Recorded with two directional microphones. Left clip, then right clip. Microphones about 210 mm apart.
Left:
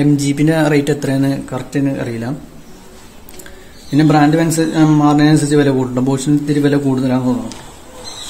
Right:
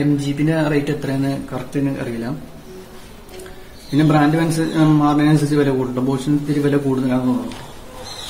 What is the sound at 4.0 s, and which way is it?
A man's voice, 45° left (ahead or behind).